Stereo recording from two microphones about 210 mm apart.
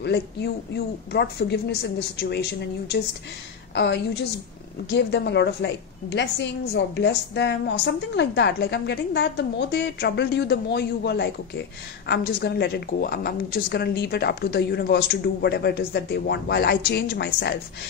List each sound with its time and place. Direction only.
0.0 s a woman's voice: 50° left (ahead or behind)
3.7 s a woman's voice: 55° left (ahead or behind)